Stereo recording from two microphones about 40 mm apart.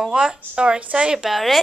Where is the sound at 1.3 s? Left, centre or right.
Centre.